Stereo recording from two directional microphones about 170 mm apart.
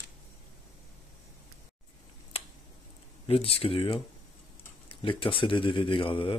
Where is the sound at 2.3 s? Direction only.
35° left (ahead or behind).